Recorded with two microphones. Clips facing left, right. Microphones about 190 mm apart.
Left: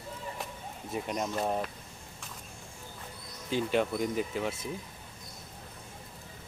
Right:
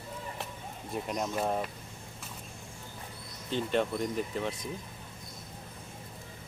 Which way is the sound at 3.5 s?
5° left (ahead or behind).